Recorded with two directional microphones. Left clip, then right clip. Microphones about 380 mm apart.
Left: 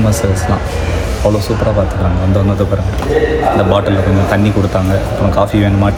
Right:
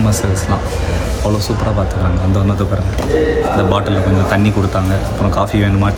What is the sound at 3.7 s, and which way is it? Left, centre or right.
Speech, centre.